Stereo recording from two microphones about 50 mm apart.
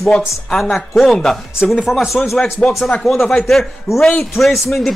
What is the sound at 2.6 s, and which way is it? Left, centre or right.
Speech, centre.